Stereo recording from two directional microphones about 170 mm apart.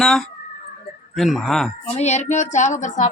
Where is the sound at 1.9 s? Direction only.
40° left (ahead or behind).